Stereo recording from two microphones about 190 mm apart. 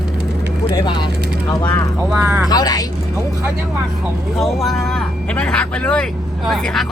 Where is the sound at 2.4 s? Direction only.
20° left (ahead or behind).